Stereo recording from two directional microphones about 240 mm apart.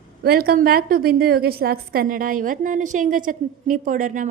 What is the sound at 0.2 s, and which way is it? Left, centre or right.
A woman's voice, right.